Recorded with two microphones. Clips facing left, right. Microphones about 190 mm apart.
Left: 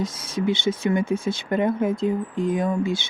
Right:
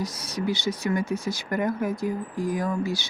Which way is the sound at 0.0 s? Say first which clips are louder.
Left 4 dB; 25° left (ahead or behind).